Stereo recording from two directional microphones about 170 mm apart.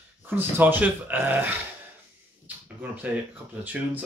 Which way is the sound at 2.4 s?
10° right (ahead or behind).